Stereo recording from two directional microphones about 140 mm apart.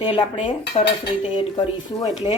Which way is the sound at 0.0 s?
35° left (ahead or behind).